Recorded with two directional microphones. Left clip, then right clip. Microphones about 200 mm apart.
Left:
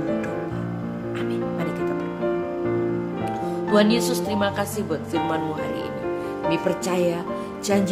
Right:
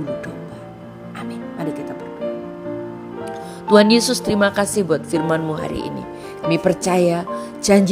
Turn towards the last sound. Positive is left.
turn(degrees=-35)  # may be behind; listen again after turning